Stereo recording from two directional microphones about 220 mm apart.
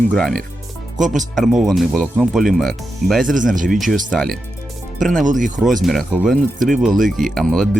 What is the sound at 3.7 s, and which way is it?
Speech, centre (ahead or behind).